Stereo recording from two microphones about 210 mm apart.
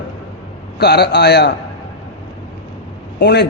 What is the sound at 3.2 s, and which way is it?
Speech, 50° left (ahead or behind).